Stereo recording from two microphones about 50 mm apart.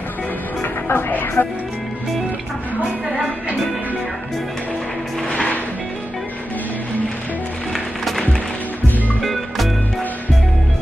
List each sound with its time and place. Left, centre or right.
0.6 s music: left
7.7 s music: centre